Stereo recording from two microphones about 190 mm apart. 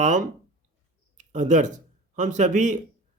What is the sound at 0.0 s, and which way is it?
Speech, 40° right (ahead or behind).